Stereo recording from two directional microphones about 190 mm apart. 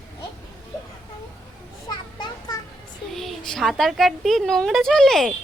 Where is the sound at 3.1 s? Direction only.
Centre (ahead or behind).